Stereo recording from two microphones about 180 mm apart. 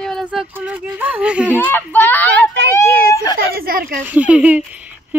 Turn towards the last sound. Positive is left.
turn(degrees=-10)  # may be behind; listen again after turning